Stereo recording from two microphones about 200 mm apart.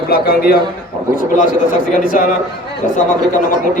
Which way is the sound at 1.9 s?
45° left (ahead or behind).